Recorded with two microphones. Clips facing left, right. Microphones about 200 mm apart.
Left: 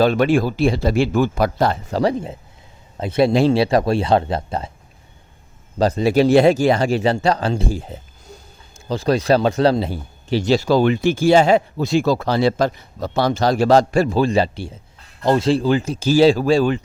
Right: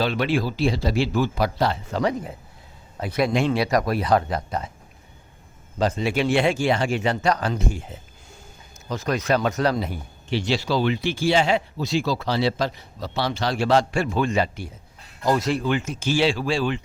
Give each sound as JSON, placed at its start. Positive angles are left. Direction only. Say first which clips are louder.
{"t": 0.0, "sound": "speech", "louder": "left 7 dB", "side_deg": 45}
{"t": 2.0, "sound": "speech", "louder": "left 5 dB", "side_deg": 30}
{"t": 5.8, "sound": "speech", "louder": "left 7 dB", "side_deg": 35}